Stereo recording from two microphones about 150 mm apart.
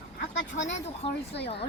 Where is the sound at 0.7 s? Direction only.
45° left (ahead or behind).